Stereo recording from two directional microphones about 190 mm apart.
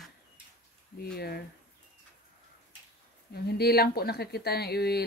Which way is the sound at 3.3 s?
55° left (ahead or behind).